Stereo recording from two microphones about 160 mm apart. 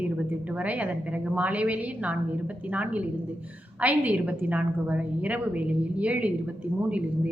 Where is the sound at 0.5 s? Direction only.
10° right (ahead or behind).